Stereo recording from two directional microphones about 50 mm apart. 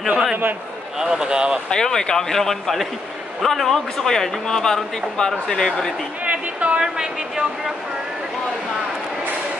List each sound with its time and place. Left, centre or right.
0.9 s speech: centre
1.7 s speech: centre
6.2 s a sound: right
6.8 s a woman's voice: centre